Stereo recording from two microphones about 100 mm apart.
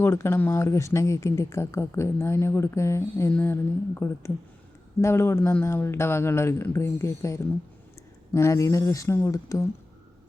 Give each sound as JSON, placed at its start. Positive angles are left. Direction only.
{"t": 0.0, "sound": "speech", "side_deg": 25}